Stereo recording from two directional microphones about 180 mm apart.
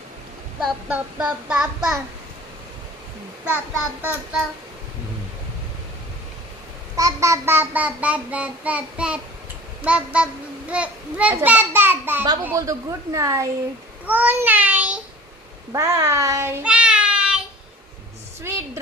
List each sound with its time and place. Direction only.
0.9 s child singing: 5° right (ahead or behind)
3.4 s child singing: 10° right (ahead or behind)
6.9 s child singing: 20° right (ahead or behind)
18.4 s a sound: 15° right (ahead or behind)